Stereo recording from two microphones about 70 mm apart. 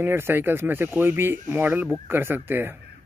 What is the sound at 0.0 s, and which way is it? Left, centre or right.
Speech, right.